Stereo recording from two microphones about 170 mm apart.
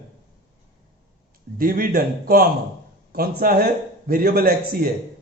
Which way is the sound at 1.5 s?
55° right (ahead or behind).